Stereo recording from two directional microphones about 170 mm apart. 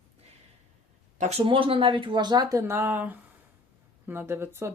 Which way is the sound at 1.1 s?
40° right (ahead or behind).